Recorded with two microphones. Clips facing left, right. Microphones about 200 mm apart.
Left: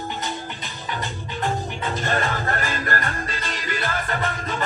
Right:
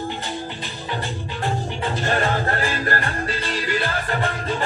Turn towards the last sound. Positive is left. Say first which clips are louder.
# right 3 dB
turn(degrees=-30)  # may be behind; listen again after turning